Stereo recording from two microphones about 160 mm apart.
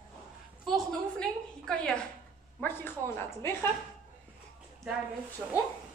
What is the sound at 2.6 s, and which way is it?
Speech, 15° left (ahead or behind).